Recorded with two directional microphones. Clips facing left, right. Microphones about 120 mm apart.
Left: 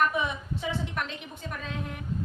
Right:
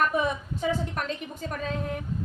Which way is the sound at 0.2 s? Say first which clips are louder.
Right 4 dB; 40° right (ahead or behind).